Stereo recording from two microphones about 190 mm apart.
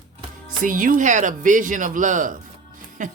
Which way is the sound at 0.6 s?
45° right (ahead or behind).